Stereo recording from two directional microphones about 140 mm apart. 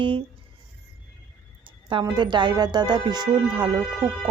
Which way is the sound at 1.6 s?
35° right (ahead or behind).